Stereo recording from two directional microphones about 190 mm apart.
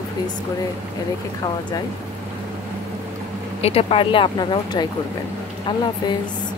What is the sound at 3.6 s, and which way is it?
Speech, 30° left (ahead or behind).